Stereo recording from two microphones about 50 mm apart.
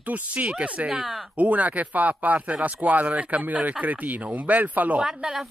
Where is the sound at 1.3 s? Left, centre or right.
Right.